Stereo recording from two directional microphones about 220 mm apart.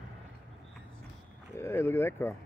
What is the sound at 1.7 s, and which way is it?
Speech, 10° left (ahead or behind).